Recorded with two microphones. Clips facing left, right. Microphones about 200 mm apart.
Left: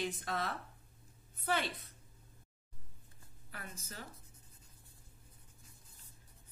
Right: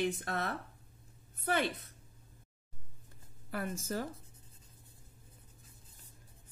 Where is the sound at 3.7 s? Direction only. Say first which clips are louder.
Right 14 dB; 90° right.